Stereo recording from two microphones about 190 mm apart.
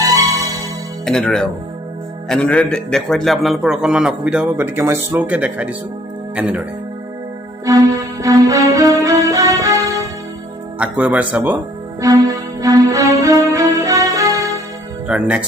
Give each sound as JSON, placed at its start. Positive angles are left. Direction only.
{"t": 0.0, "sound": "music", "side_deg": -20}
{"t": 1.0, "sound": "a man's voice", "side_deg": 5}
{"t": 7.6, "sound": "music", "side_deg": -15}
{"t": 10.8, "sound": "speech", "side_deg": -5}
{"t": 11.9, "sound": "music", "side_deg": -15}
{"t": 15.0, "sound": "speech", "side_deg": -5}